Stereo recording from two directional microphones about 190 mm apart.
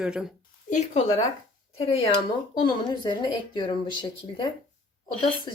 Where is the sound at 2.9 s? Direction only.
25° left (ahead or behind).